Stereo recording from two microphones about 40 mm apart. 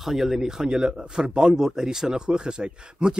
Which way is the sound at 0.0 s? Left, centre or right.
Centre.